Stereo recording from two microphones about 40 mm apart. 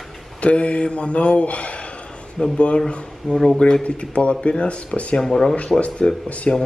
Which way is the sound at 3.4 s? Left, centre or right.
Centre.